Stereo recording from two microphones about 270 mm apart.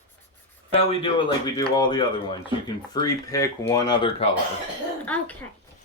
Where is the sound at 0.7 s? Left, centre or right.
Centre.